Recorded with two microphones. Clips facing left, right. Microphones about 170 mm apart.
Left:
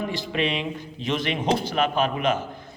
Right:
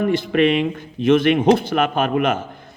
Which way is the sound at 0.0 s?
55° right (ahead or behind).